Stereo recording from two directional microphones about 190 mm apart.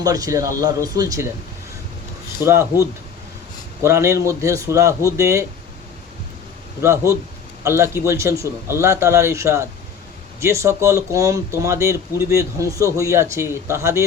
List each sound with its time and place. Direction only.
0.0 s speech: 20° right (ahead or behind)
2.5 s speech: 15° right (ahead or behind)
6.8 s speech: 15° right (ahead or behind)